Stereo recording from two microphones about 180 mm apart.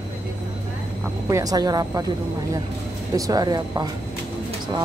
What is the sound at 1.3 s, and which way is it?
Speech, 20° right (ahead or behind).